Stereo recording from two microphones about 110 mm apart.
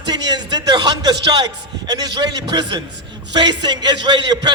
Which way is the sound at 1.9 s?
40° right (ahead or behind).